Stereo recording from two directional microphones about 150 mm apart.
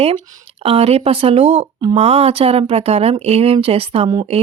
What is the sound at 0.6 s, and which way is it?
Speech, 40° right (ahead or behind).